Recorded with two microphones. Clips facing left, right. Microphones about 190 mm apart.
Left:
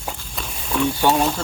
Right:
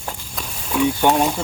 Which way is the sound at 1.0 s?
15° right (ahead or behind).